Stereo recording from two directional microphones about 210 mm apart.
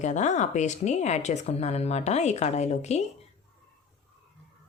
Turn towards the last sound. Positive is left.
turn(degrees=30)  # may be behind; listen again after turning